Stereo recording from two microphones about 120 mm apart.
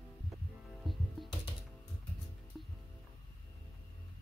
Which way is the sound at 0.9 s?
Centre (ahead or behind).